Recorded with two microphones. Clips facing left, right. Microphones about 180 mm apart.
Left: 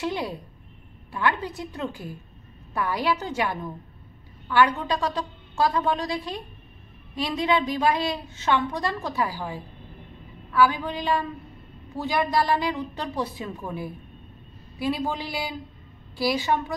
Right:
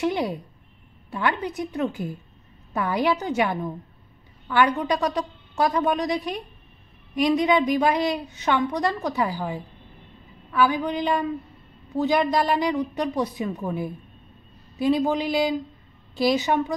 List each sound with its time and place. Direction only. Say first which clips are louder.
0.0 s a woman's voice: right 4 dB; 20° right (ahead or behind)